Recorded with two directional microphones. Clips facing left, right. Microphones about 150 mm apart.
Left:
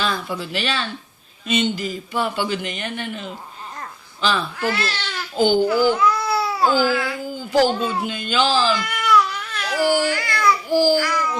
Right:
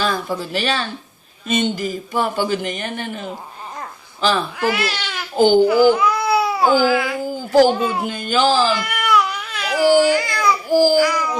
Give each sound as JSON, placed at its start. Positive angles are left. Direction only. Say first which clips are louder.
{"t": 0.0, "sound": "a man's voice", "louder": "right 3 dB", "side_deg": -45}
{"t": 4.6, "sound": "speech", "louder": "right 3 dB", "side_deg": -10}
{"t": 5.9, "sound": "baby cry", "louder": "right 3 dB", "side_deg": -10}
{"t": 7.3, "sound": "a sound", "louder": "right 4 dB", "side_deg": -45}
{"t": 7.7, "sound": "speech", "louder": "right 3 dB", "side_deg": -10}
{"t": 8.0, "sound": "a man's voice", "louder": "right 4 dB", "side_deg": -45}
{"t": 8.7, "sound": "baby cry", "louder": "even", "side_deg": -10}
{"t": 10.7, "sound": "a child's voice", "louder": "right 4 dB", "side_deg": -45}
{"t": 10.9, "sound": "babbling", "louder": "right 4 dB", "side_deg": -10}